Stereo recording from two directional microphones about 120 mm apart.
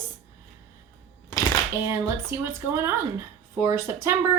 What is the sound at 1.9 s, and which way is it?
Speech, 20° right (ahead or behind).